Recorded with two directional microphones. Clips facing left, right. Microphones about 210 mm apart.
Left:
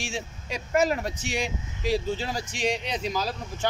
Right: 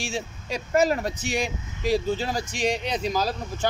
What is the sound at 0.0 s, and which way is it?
Speech, 35° right (ahead or behind).